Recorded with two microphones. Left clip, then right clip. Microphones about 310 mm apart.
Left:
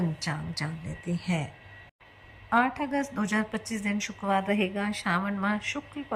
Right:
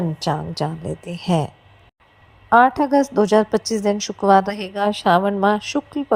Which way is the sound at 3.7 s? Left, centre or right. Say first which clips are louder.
Right 12 dB; right.